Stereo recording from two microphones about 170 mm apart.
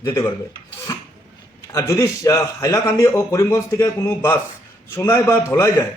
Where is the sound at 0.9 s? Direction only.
20° left (ahead or behind).